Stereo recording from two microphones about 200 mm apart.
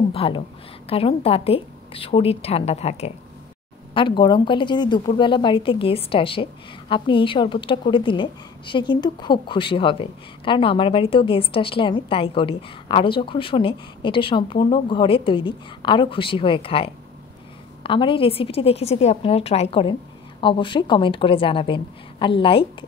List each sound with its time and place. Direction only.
0.1 s a woman's voice: 30° left (ahead or behind)